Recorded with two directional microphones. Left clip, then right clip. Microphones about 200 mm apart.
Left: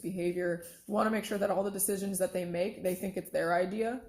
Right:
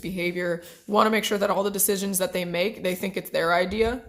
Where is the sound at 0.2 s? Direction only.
25° right (ahead or behind).